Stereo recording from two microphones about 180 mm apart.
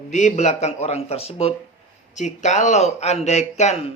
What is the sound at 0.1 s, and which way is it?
Speech, 40° left (ahead or behind).